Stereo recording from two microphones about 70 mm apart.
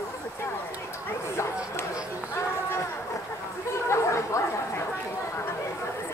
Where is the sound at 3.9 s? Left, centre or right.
Left.